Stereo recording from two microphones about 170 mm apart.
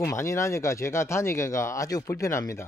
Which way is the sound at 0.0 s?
20° left (ahead or behind).